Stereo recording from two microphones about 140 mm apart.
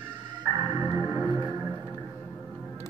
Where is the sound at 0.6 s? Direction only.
15° right (ahead or behind).